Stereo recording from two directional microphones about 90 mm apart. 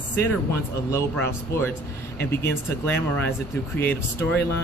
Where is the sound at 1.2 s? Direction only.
25° left (ahead or behind).